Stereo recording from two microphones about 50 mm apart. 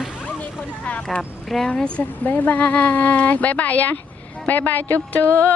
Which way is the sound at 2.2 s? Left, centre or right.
Left.